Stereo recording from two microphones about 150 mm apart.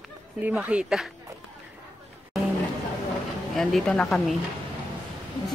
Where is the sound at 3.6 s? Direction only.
Centre (ahead or behind).